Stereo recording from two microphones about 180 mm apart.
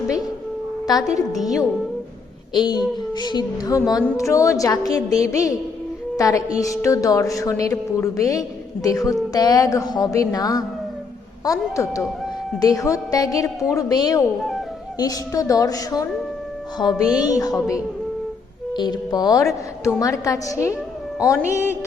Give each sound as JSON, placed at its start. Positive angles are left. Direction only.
{"t": 0.9, "sound": "a woman's voice", "side_deg": 20}
{"t": 1.4, "sound": "speech", "side_deg": 0}
{"t": 2.5, "sound": "a woman's voice", "side_deg": 25}